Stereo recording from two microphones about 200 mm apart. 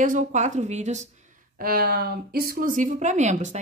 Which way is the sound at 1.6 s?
45° right (ahead or behind).